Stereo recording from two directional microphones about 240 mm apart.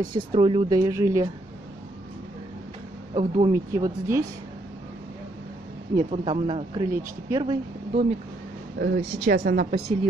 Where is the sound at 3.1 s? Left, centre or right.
Centre.